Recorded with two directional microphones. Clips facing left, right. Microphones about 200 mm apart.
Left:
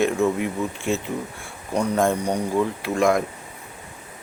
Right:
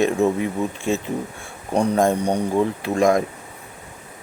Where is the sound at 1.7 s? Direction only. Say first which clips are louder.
Right 3 dB; 35° right (ahead or behind).